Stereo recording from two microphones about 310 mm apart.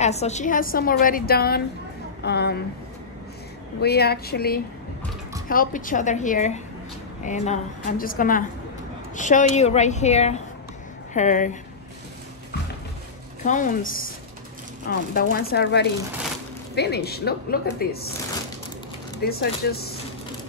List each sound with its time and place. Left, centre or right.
0.0 s a woman's voice: left
3.8 s a woman's voice: left
13.4 s a woman's voice: left
19.2 s a woman's voice: left